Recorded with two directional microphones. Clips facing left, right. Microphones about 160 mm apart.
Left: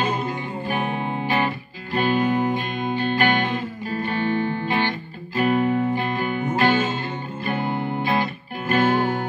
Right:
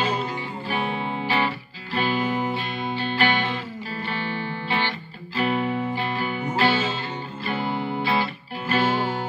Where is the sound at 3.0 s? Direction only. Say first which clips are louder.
Left 3 dB; 50° left (ahead or behind).